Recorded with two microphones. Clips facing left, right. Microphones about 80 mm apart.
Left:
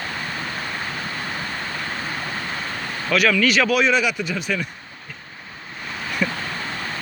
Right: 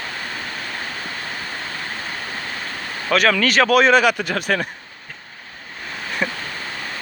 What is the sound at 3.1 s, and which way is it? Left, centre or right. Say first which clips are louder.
Speech: right 1 dB; right.